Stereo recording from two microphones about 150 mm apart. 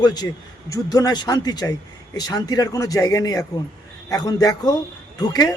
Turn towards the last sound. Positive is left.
turn(degrees=25)  # may be behind; listen again after turning